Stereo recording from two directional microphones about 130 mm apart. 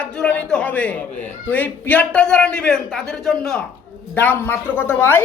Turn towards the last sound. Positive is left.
turn(degrees=15)  # may be behind; listen again after turning